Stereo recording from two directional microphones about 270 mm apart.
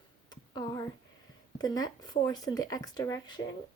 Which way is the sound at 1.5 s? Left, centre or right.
Centre.